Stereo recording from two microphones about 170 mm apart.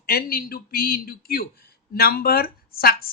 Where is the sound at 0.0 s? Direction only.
60° left (ahead or behind).